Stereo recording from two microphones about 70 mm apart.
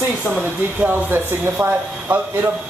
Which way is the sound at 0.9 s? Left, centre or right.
Right.